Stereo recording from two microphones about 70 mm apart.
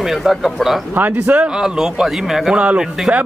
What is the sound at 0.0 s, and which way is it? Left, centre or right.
Speech, centre.